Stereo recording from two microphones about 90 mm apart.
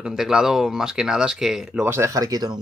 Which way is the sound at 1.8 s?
30° right (ahead or behind).